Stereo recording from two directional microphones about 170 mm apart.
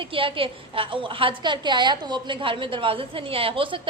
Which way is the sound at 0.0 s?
30° right (ahead or behind).